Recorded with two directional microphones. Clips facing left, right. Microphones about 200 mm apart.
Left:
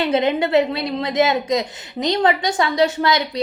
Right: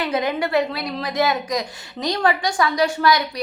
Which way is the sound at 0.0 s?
25° left (ahead or behind).